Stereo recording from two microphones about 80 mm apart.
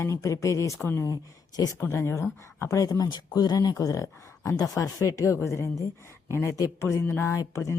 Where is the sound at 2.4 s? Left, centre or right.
Left.